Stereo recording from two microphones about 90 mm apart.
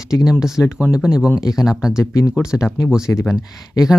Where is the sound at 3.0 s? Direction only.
30° left (ahead or behind).